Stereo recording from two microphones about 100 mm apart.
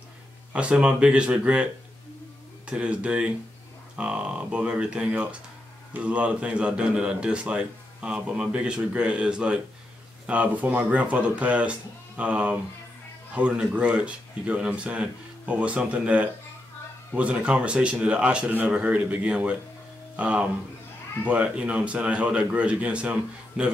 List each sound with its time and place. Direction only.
0.5 s a man's voice: 10° right (ahead or behind)